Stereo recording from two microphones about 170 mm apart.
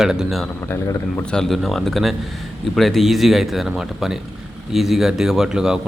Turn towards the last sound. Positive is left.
turn(degrees=-5)  # may be behind; listen again after turning